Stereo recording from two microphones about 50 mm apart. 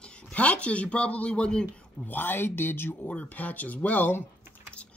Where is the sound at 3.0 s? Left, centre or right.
Left.